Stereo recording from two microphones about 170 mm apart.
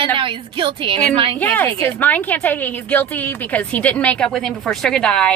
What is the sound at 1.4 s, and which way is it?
A woman's voice, 10° left (ahead or behind).